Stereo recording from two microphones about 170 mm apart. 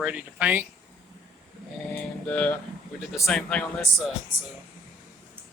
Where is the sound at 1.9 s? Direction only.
10° left (ahead or behind).